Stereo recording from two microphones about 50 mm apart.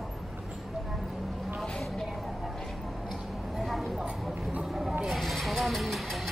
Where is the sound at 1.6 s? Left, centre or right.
Centre.